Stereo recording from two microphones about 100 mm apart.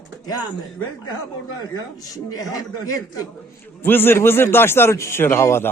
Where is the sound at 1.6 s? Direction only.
40° left (ahead or behind).